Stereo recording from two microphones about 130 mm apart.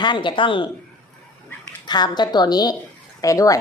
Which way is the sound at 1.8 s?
35° left (ahead or behind).